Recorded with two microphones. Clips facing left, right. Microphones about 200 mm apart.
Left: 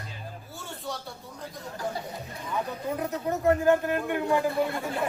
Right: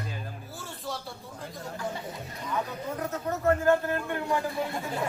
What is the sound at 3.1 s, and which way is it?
Speech, 15° left (ahead or behind).